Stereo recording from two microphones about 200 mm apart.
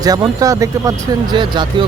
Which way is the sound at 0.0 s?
20° right (ahead or behind).